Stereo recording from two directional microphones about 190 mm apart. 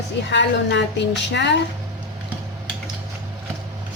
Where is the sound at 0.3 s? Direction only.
65° left (ahead or behind).